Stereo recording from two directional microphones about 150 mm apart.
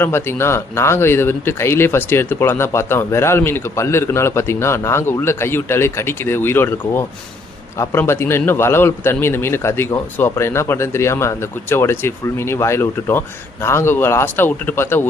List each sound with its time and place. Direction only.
0.0 s a man's voice: 15° left (ahead or behind)